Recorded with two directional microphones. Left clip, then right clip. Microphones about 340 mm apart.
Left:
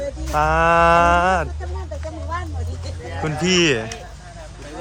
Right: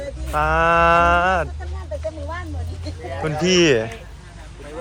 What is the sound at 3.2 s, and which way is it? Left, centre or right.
Speech, centre.